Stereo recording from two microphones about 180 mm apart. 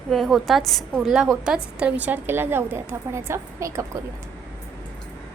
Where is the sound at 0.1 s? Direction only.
Centre (ahead or behind); by 3.8 s 15° right (ahead or behind).